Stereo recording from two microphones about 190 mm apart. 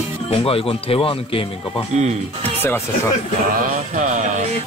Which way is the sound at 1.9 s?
35° right (ahead or behind).